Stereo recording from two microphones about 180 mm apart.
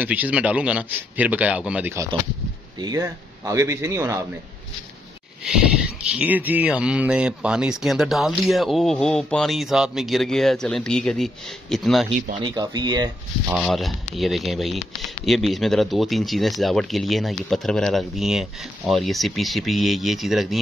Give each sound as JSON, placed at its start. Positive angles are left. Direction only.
{"t": 0.0, "sound": "a man's voice", "side_deg": -10}
{"t": 6.0, "sound": "speech", "side_deg": -5}
{"t": 12.4, "sound": "speech", "side_deg": -25}
{"t": 13.5, "sound": "speech", "side_deg": 0}